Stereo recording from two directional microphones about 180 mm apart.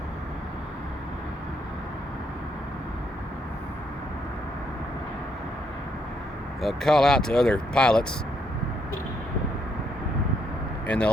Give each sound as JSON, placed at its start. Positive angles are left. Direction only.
{"t": 6.6, "sound": "speech", "side_deg": 0}
{"t": 10.8, "sound": "speech", "side_deg": 5}